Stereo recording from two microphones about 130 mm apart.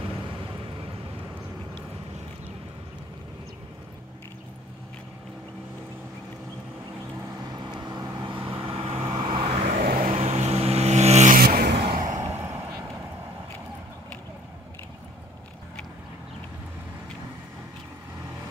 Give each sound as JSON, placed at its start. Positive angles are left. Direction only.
{"t": 7.8, "sound": "vehicle", "side_deg": -30}
{"t": 8.5, "sound": "vehicle", "side_deg": -45}
{"t": 9.5, "sound": "vehicle", "side_deg": -70}
{"t": 10.1, "sound": "vehicle", "side_deg": -55}
{"t": 12.4, "sound": "vehicle", "side_deg": -20}